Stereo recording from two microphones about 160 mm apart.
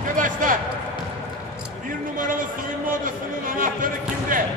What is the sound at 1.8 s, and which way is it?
A man's voice, 55° right (ahead or behind).